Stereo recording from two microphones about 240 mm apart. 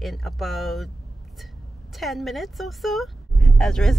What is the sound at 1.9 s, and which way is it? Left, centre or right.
Speech, centre.